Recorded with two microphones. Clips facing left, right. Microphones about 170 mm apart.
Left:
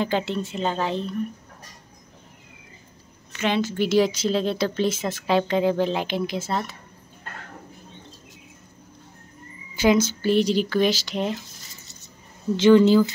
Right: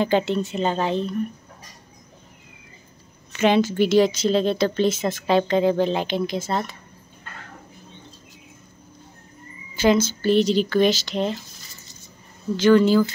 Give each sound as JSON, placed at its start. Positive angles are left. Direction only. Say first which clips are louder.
{"t": 0.0, "sound": "speech", "louder": "right 4 dB", "side_deg": 0}
{"t": 3.3, "sound": "a woman's voice", "louder": "right 5 dB", "side_deg": -15}
{"t": 3.7, "sound": "speech", "louder": "right 3 dB", "side_deg": 5}
{"t": 9.8, "sound": "speech", "louder": "right 1 dB", "side_deg": 15}
{"t": 12.5, "sound": "speech", "louder": "left 1 dB", "side_deg": 25}